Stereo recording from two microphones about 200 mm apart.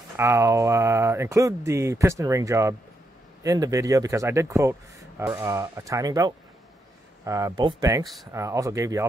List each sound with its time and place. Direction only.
0.1 s speech: 15° right (ahead or behind)